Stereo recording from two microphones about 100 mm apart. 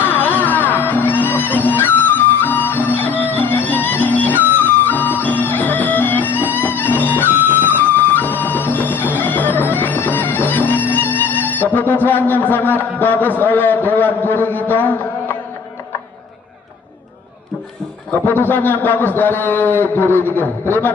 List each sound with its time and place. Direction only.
0.0 s music: 20° left (ahead or behind)
18.3 s a man's voice: 20° left (ahead or behind)